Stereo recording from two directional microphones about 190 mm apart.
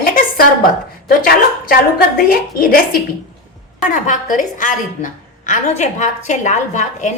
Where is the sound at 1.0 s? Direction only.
50° left (ahead or behind).